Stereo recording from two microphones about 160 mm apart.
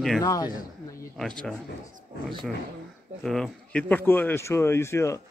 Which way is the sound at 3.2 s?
Centre (ahead or behind).